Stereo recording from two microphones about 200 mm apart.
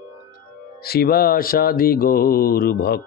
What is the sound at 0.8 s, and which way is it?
Mantra, 50° left (ahead or behind).